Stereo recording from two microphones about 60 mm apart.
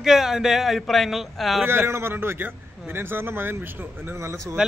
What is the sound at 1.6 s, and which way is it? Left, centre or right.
A man's voice, right.